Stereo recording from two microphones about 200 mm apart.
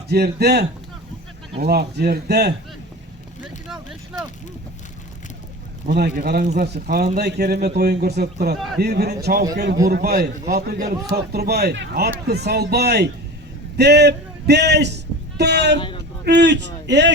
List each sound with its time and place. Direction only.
0.1 s a man's voice: 55° right (ahead or behind)
3.7 s speech: 5° right (ahead or behind)
5.9 s a man's voice: 55° right (ahead or behind)
8.5 s a man's voice: centre (ahead or behind)
8.8 s a man's voice: 55° right (ahead or behind)